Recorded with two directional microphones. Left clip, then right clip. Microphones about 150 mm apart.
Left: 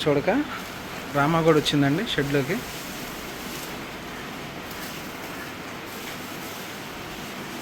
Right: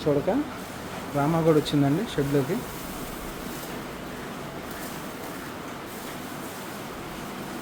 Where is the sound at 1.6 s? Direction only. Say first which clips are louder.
Left 2 dB; centre (ahead or behind).